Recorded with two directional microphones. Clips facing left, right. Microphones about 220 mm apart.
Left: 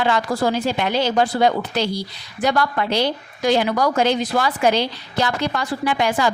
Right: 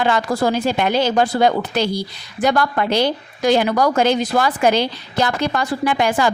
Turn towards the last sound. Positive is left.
turn(degrees=-50)  # may be behind; listen again after turning